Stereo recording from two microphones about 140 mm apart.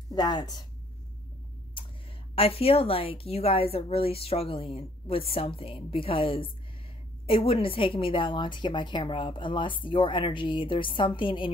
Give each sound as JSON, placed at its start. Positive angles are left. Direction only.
{"t": 0.1, "sound": "a woman's voice", "side_deg": 30}
{"t": 2.3, "sound": "a woman's voice", "side_deg": 45}